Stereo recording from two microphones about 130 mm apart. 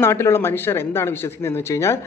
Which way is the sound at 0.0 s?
20° left (ahead or behind).